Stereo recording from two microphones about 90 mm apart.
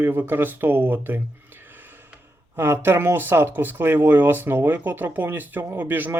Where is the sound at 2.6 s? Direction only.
25° right (ahead or behind).